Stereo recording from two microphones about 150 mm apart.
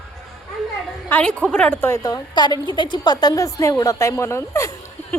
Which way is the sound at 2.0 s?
25° left (ahead or behind).